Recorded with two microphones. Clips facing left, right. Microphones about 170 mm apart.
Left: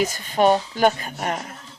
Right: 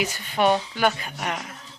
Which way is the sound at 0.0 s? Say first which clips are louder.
Left 4 dB; 40° left (ahead or behind).